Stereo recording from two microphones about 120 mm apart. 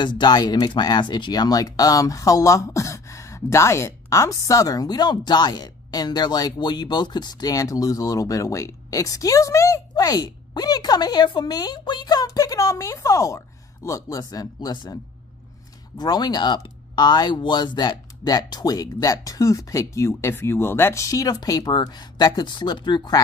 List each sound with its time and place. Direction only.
0.0 s speech: 40° left (ahead or behind)
16.0 s speech: 35° left (ahead or behind)